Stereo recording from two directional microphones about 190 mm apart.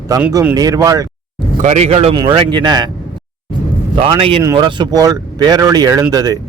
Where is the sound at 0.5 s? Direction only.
20° right (ahead or behind).